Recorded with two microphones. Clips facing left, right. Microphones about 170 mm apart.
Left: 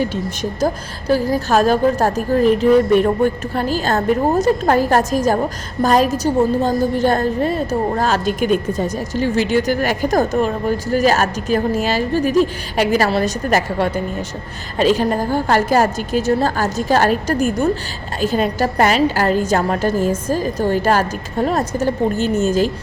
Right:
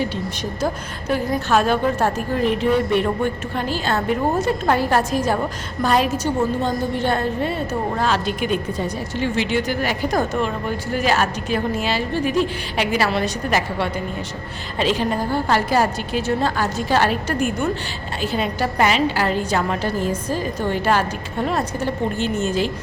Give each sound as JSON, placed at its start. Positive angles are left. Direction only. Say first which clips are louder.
{"t": 0.6, "sound": "a woman's voice", "louder": "left 4 dB", "side_deg": 35}